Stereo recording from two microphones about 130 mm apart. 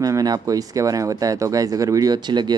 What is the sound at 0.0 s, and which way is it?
Speech, 30° right (ahead or behind).